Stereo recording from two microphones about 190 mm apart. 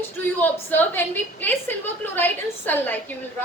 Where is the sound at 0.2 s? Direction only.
10° left (ahead or behind).